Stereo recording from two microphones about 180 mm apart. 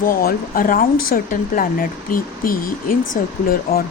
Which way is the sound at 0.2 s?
55° left (ahead or behind).